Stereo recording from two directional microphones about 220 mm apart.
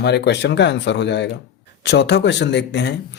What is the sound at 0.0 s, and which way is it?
Speech, 50° left (ahead or behind).